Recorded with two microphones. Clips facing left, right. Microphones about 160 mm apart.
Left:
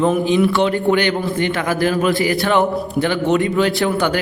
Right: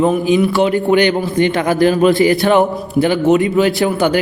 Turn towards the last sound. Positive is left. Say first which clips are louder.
# right 3 dB
turn(degrees=-15)  # may be behind; listen again after turning